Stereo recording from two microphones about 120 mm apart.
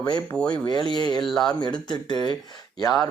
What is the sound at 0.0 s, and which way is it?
Speech, 35° left (ahead or behind).